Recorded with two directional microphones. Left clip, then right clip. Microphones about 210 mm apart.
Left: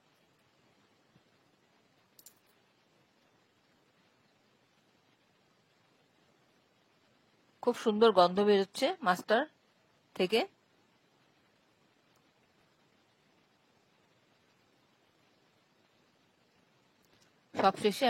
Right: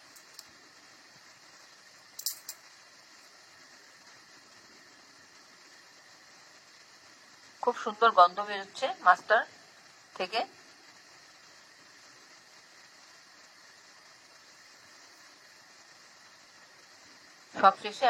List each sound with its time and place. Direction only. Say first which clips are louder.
7.6 s speech: right 1 dB; 45° left (ahead or behind)
17.6 s speech: right 4 dB; 45° left (ahead or behind)